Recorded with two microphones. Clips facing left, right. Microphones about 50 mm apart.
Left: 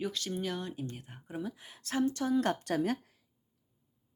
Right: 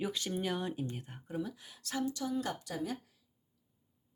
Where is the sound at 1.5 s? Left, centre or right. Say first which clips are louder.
Left 5 dB; left.